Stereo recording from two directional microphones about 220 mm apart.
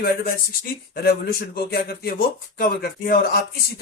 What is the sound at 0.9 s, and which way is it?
Speech, 45° left (ahead or behind).